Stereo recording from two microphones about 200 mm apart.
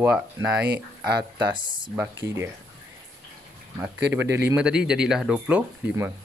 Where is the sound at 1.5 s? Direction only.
25° right (ahead or behind).